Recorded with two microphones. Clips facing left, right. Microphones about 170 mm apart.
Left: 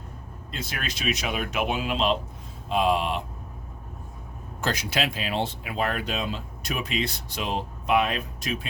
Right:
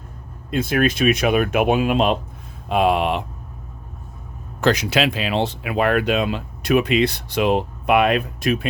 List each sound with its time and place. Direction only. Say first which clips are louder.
0.5 s speech: right 16 dB; 55° right (ahead or behind)
4.6 s speech: right 9 dB; 75° right (ahead or behind)